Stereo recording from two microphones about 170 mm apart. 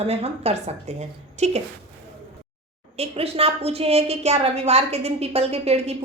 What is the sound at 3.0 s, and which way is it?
A woman's voice, 35° right (ahead or behind).